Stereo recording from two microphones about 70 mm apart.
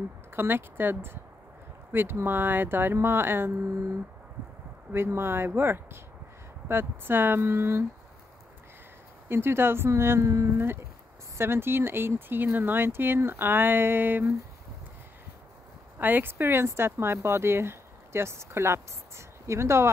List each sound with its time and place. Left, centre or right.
0.4 s speech: right
4.9 s speech: right
9.3 s speech: right
16.0 s speech: right